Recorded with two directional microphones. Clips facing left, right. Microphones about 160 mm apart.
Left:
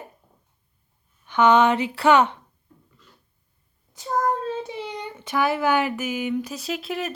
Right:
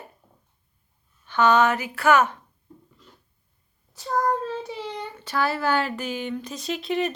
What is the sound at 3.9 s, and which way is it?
Child singing, 20° left (ahead or behind).